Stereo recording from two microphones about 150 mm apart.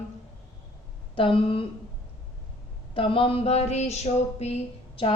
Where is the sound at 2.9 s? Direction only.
35° left (ahead or behind).